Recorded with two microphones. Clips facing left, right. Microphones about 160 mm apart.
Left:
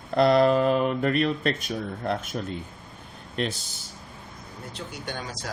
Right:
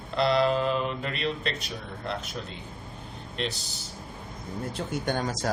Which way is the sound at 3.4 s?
50° left (ahead or behind).